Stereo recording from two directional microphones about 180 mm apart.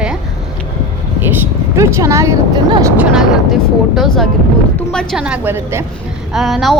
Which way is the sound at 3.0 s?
5° right (ahead or behind).